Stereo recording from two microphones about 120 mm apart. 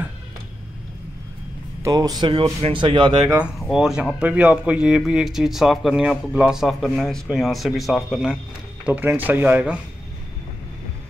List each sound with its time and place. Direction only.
1.8 s speech: 30° right (ahead or behind)
3.5 s speech: centre (ahead or behind)
8.8 s speech: 15° right (ahead or behind)